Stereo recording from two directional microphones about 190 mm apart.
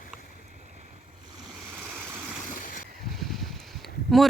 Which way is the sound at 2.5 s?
45° left (ahead or behind).